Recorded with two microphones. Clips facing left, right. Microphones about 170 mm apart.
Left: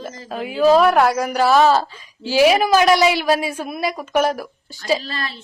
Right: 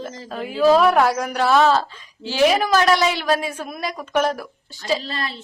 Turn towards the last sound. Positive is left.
turn(degrees=-25)  # may be behind; listen again after turning